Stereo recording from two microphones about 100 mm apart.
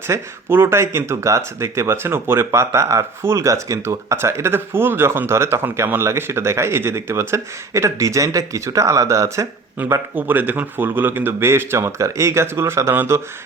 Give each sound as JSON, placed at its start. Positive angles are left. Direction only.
{"t": 0.1, "sound": "speech", "side_deg": -25}